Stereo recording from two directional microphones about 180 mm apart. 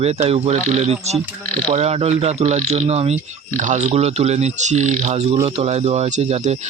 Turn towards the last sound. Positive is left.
turn(degrees=-40)  # may be behind; listen again after turning